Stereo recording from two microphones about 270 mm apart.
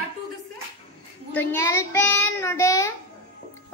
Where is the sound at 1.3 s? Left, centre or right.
Centre.